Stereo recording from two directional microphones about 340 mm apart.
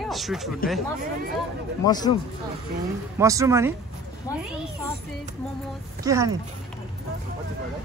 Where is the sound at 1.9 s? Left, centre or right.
Centre.